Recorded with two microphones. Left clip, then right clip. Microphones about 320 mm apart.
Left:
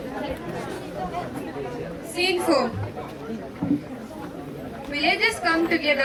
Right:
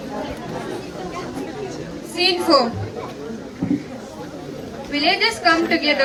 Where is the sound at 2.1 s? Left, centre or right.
Centre.